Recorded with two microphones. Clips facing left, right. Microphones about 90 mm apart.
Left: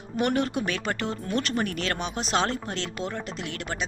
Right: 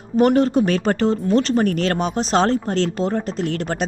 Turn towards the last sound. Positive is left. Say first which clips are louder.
# right 10 dB
turn(degrees=-40)  # may be behind; listen again after turning